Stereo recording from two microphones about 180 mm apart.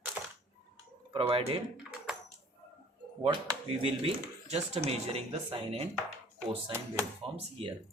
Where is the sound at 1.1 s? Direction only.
30° right (ahead or behind).